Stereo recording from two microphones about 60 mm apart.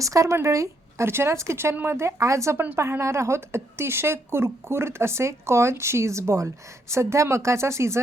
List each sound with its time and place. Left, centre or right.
0.0 s speech: right
1.0 s a woman's voice: right